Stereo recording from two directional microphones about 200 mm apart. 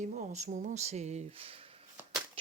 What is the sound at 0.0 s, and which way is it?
Speech, 40° right (ahead or behind).